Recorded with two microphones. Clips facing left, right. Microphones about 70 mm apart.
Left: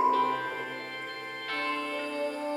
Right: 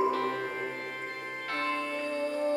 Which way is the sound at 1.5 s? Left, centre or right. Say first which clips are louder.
Even; right.